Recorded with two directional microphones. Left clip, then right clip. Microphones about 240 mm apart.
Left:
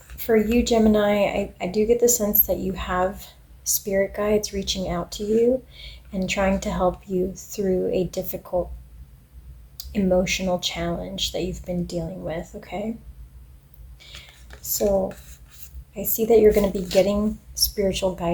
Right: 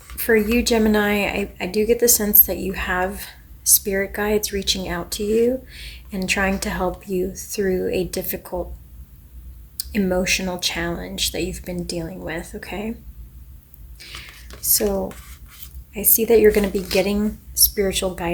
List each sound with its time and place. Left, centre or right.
0.2 s a woman's voice: right
9.7 s a woman's voice: right
14.6 s speech: right
15.9 s a woman's voice: right